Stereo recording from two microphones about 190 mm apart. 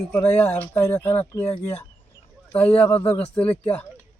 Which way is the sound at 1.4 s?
35° left (ahead or behind).